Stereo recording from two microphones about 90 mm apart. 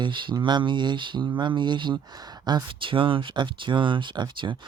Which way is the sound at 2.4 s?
40° right (ahead or behind).